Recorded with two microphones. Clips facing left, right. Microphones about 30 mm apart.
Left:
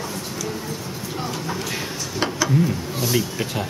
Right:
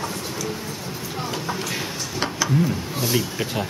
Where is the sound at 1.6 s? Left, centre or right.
Centre.